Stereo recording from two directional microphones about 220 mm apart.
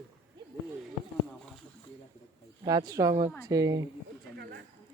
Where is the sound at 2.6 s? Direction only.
15° right (ahead or behind).